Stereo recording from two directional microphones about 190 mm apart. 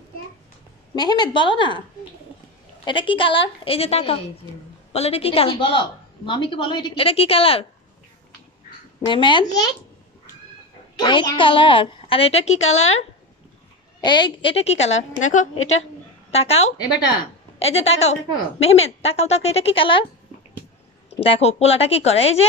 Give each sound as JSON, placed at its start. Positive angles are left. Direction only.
{"t": 0.9, "sound": "a woman's voice", "side_deg": 20}
{"t": 2.8, "sound": "a woman's voice", "side_deg": 25}
{"t": 9.0, "sound": "a woman's voice", "side_deg": 25}
{"t": 11.0, "sound": "a woman's voice", "side_deg": 25}
{"t": 14.0, "sound": "a woman's voice", "side_deg": 25}
{"t": 21.2, "sound": "a woman's voice", "side_deg": 30}